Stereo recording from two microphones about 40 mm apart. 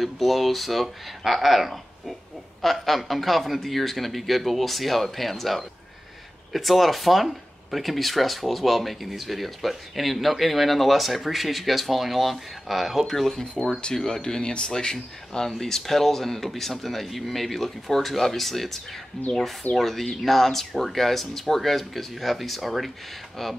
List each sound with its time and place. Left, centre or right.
0.0 s speech: centre